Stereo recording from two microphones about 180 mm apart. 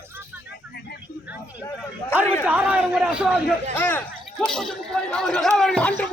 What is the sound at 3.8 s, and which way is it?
Speech, 10° left (ahead or behind).